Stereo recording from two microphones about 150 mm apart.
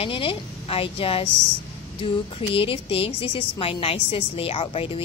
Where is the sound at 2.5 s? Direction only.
40° left (ahead or behind).